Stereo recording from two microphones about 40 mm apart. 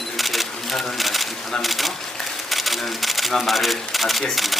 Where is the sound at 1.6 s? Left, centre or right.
Centre.